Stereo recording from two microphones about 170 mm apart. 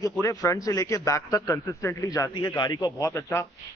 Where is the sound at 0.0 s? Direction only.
20° left (ahead or behind).